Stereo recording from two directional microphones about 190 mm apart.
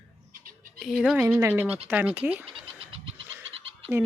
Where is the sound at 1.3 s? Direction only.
10° right (ahead or behind).